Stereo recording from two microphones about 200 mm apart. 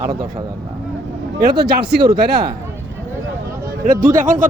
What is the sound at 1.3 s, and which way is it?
Speech, 50° right (ahead or behind).